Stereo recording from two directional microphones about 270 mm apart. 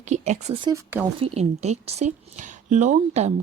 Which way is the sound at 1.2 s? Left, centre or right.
Right.